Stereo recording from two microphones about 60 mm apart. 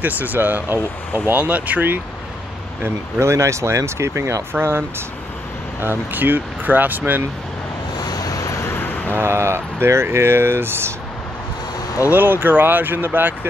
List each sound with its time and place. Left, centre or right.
0.0 s speech: right
2.8 s speech: right
8.1 s vehicle: left
8.6 s a sound: left
9.2 s speech: right
12.1 s speech: right